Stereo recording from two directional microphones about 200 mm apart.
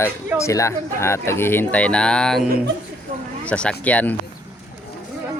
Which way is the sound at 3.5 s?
5° left (ahead or behind).